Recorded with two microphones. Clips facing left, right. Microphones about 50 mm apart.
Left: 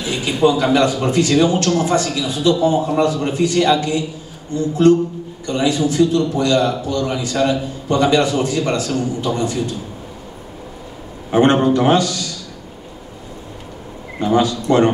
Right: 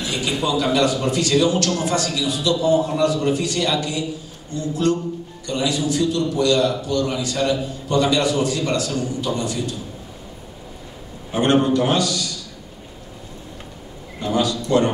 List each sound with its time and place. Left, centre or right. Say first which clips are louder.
0.0 s a man's voice: left 7 dB; left
11.3 s a man's voice: left 4 dB; left
14.2 s a man's voice: left 5 dB; left